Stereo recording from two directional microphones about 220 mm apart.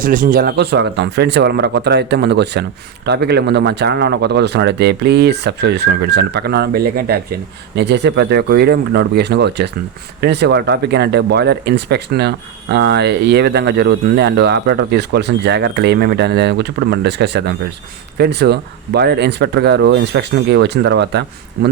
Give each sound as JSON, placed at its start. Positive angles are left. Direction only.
{"t": 0.0, "sound": "speech", "side_deg": -40}